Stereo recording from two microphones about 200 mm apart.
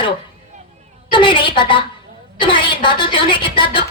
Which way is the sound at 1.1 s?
25° left (ahead or behind).